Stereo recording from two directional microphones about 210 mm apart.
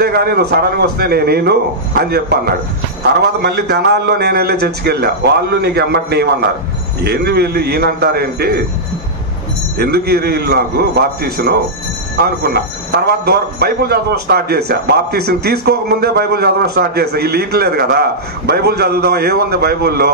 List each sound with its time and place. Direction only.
0.0 s a man's voice: 50° right (ahead or behind)
9.8 s a man's voice: 50° right (ahead or behind)